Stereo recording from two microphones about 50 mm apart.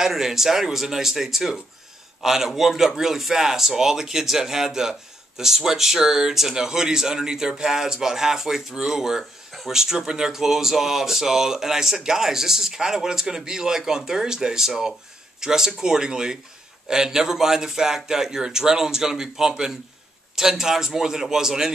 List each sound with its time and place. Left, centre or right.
0.0 s speech: centre